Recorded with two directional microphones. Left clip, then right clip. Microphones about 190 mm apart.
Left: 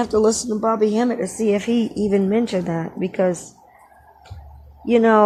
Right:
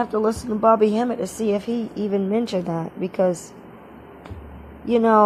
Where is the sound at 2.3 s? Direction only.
10° right (ahead or behind).